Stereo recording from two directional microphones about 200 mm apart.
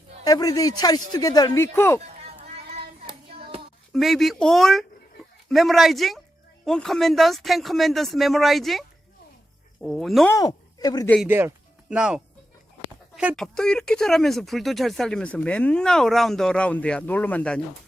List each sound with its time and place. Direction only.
0.3 s speech: 20° left (ahead or behind)
2.7 s child singing: 30° right (ahead or behind)
3.9 s speech: centre (ahead or behind)
9.8 s speech: centre (ahead or behind)
10.3 s speech: 20° left (ahead or behind)
11.3 s speech: 10° right (ahead or behind); by 17.6 s 5° left (ahead or behind)